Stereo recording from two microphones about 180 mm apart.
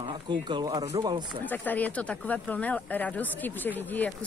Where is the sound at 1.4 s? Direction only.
10° left (ahead or behind).